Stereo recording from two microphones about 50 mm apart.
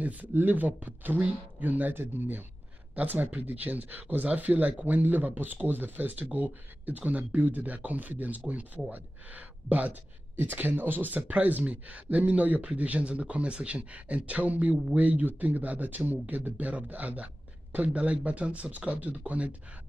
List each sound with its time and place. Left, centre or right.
0.0 s speech: right